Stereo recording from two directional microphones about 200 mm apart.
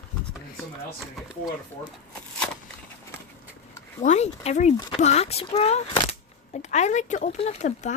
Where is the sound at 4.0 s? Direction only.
35° left (ahead or behind).